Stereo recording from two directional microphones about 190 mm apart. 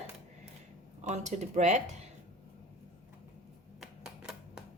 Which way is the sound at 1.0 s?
35° right (ahead or behind).